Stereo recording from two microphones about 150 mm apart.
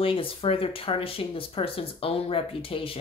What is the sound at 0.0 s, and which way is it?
Speech, 35° left (ahead or behind).